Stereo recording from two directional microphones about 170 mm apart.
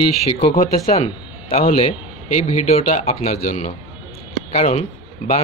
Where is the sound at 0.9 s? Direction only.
35° left (ahead or behind).